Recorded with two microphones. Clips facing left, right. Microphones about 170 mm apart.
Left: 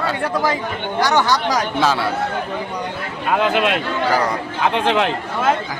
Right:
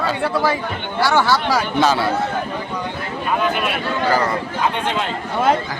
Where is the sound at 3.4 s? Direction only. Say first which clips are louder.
Left 6 dB; 85° left.